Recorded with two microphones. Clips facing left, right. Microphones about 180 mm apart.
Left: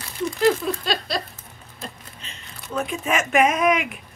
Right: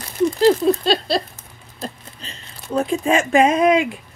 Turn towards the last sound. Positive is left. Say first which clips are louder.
# right 5 dB
turn(degrees=-30)  # may be behind; listen again after turning